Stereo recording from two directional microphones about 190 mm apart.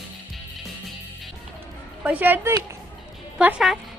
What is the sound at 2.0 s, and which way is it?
A woman's voice, 10° right (ahead or behind).